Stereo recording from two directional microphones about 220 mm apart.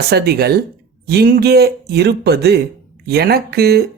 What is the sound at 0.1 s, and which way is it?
Speech, 45° right (ahead or behind).